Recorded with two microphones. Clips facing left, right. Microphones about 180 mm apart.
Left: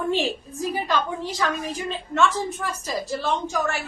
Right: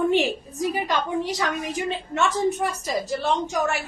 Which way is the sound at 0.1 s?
15° right (ahead or behind).